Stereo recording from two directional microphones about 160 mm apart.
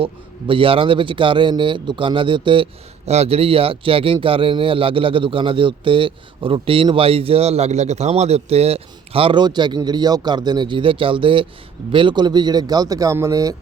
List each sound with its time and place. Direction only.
0.0 s speech: 35° right (ahead or behind)